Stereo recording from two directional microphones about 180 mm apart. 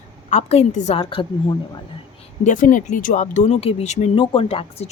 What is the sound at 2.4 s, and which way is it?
Speech, 45° left (ahead or behind).